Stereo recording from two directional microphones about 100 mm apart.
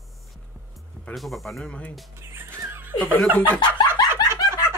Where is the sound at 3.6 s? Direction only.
45° left (ahead or behind).